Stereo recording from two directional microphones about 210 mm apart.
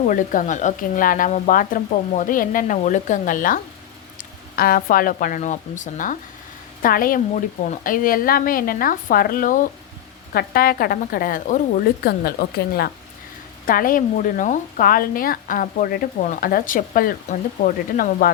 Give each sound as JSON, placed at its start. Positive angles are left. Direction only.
{"t": 0.1, "sound": "a woman's voice", "side_deg": 40}